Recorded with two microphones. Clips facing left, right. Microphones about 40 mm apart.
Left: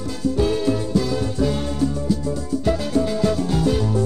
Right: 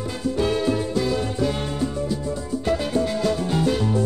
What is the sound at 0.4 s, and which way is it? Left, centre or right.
Music, right.